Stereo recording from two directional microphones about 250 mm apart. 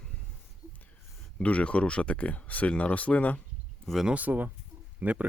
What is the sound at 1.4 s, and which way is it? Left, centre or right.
Speech, centre.